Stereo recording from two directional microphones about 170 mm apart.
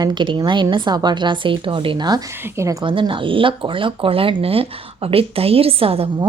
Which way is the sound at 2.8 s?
30° right (ahead or behind).